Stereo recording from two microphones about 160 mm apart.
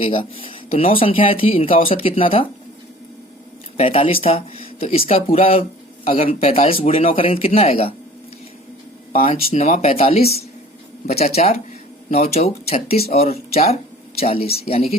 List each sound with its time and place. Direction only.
0.1 s speech: 30° left (ahead or behind)
3.8 s speech: 35° left (ahead or behind)
9.1 s speech: 40° left (ahead or behind)